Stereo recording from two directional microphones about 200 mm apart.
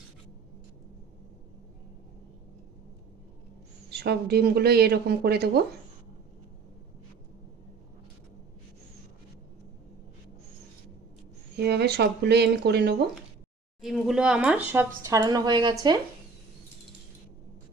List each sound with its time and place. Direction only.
3.8 s speech: 55° right (ahead or behind)
11.5 s speech: 55° right (ahead or behind)
13.8 s speech: centre (ahead or behind); by 15.7 s 20° right (ahead or behind)